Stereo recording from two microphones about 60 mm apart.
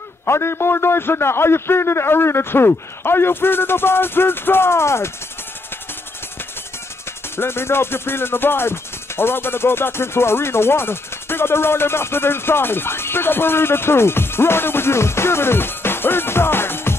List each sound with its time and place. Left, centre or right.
0.2 s music: left
7.3 s music: left